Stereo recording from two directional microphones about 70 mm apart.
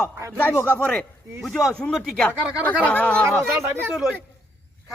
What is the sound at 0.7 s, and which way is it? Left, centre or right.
Speech, centre.